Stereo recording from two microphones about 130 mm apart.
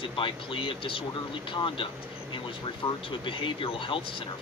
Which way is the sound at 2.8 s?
40° left (ahead or behind).